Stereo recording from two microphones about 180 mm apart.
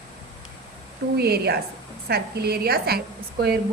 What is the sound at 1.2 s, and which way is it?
A woman's voice, 60° right (ahead or behind).